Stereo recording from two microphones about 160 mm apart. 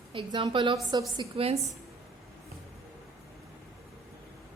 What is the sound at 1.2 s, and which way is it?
Speech, 35° right (ahead or behind).